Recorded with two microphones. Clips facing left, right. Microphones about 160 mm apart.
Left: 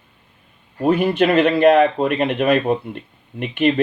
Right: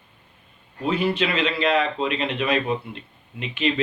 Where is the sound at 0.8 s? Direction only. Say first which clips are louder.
Left 7 dB; 55° left (ahead or behind).